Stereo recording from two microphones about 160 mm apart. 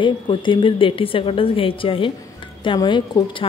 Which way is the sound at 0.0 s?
30° left (ahead or behind).